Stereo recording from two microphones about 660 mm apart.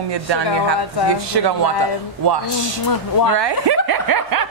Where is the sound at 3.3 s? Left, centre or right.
Right.